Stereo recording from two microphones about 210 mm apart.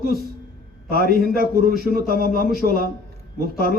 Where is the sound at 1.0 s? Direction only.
45° left (ahead or behind).